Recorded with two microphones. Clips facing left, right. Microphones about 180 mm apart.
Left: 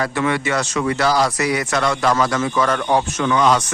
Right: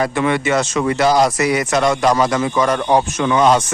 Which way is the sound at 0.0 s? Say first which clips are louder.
Right 3 dB; 20° right (ahead or behind).